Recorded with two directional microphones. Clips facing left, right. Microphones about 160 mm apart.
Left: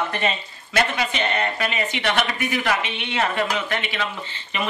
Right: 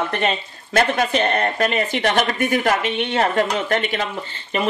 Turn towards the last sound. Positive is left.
turn(degrees=-40)  # may be behind; listen again after turning